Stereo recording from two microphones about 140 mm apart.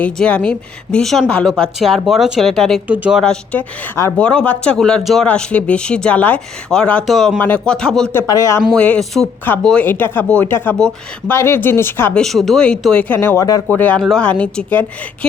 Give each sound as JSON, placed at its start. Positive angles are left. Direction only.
{"t": 0.0, "sound": "a woman's voice", "side_deg": 10}
{"t": 2.8, "sound": "speech", "side_deg": -10}
{"t": 3.5, "sound": "a woman's voice", "side_deg": 20}
{"t": 4.2, "sound": "speech", "side_deg": 10}
{"t": 8.1, "sound": "a woman's voice", "side_deg": 25}
{"t": 8.7, "sound": "a woman's voice", "side_deg": 5}
{"t": 11.3, "sound": "speech", "side_deg": 15}
{"t": 12.2, "sound": "speech", "side_deg": 0}
{"t": 13.7, "sound": "speech", "side_deg": 10}